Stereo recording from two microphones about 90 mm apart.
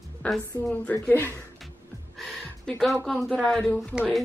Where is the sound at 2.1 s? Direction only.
5° left (ahead or behind).